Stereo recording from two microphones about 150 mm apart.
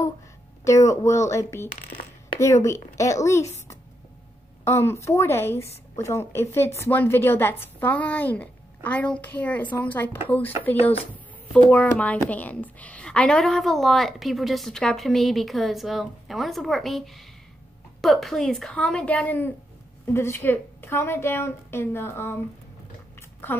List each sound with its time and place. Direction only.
0.7 s speech: 20° left (ahead or behind)
4.6 s a woman's voice: 15° left (ahead or behind)